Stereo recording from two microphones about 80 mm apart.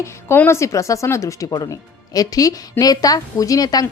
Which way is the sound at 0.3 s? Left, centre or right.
Left.